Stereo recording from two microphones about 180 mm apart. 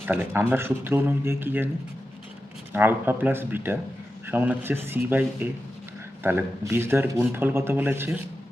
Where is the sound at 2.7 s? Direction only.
10° right (ahead or behind).